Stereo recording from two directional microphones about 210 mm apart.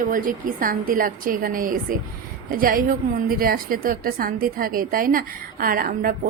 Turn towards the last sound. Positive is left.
turn(degrees=-40)  # may be behind; listen again after turning